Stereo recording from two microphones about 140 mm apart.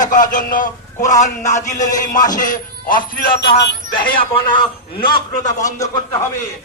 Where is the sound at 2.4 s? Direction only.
70° left (ahead or behind).